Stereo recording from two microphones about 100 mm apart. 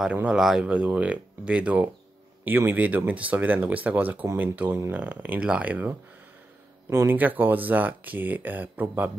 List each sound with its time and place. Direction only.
0.0 s speech: 10° right (ahead or behind)